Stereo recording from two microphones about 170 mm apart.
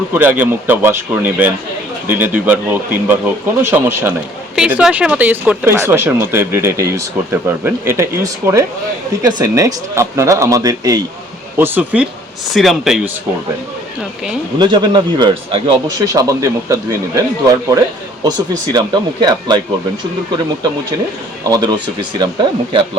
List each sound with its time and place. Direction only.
0.1 s a man's voice: 10° right (ahead or behind)
14.6 s a man's voice: 25° right (ahead or behind)
18.7 s a man's voice: 25° right (ahead or behind)
21.4 s a man's voice: 25° right (ahead or behind)